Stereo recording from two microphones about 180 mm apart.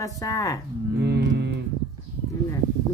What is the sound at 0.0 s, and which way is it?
Speech, 20° left (ahead or behind).